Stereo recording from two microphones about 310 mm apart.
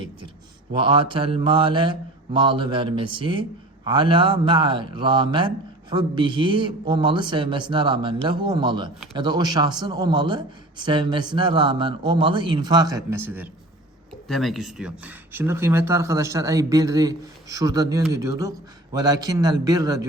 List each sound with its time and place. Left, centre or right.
0.7 s a man's voice: centre